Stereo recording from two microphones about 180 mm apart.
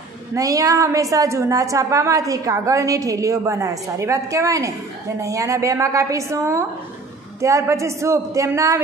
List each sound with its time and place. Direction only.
0.3 s a woman's voice: 20° right (ahead or behind)